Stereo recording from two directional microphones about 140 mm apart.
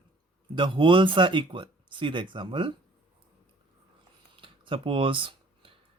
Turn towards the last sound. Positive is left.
turn(degrees=-40)  # may be behind; listen again after turning